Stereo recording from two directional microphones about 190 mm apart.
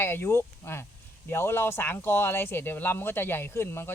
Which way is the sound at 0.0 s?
10° left (ahead or behind).